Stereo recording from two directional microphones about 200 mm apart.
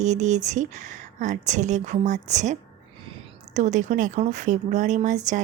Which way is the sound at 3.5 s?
35° right (ahead or behind).